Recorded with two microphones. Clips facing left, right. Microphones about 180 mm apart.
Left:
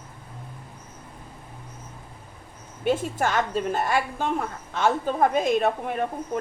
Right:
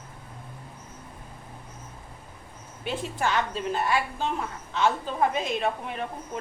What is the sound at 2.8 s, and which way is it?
A woman's voice, 45° left (ahead or behind).